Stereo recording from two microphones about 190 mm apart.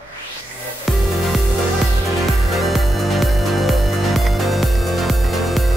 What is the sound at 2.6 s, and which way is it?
Music, centre (ahead or behind).